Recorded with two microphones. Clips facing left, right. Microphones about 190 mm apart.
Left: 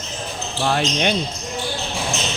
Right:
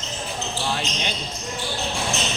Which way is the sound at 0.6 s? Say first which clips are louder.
Left 10 dB; 60° left (ahead or behind).